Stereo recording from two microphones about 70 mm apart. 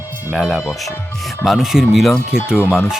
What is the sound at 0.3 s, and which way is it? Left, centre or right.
Speech, centre.